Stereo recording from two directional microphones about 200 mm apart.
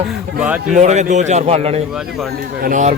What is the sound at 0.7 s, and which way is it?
A man's voice, 35° right (ahead or behind).